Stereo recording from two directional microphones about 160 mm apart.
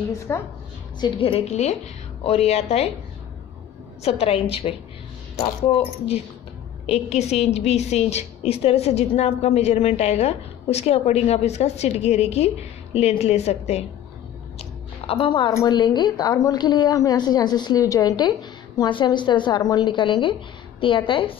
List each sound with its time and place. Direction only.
0.3 s a woman's voice: 15° left (ahead or behind)
1.0 s a woman's voice: 35° left (ahead or behind)
4.0 s a woman's voice: 35° left (ahead or behind)
6.9 s a woman's voice: 45° left (ahead or behind)
14.6 s a sound: 35° left (ahead or behind)
15.5 s a woman's voice: 25° left (ahead or behind)